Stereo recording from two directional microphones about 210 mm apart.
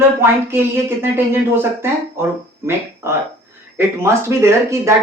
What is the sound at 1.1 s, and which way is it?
Speech, 10° right (ahead or behind).